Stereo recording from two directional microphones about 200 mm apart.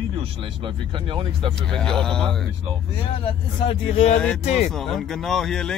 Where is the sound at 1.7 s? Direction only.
5° left (ahead or behind).